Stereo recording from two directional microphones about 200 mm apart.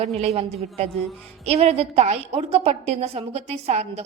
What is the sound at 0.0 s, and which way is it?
A woman's voice, 30° right (ahead or behind).